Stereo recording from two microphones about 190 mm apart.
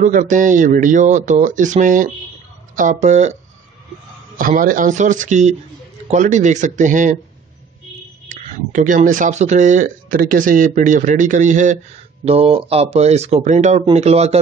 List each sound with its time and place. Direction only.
0.0 s speech: 45° right (ahead or behind)
4.4 s speech: 45° right (ahead or behind)
8.3 s speech: 40° right (ahead or behind)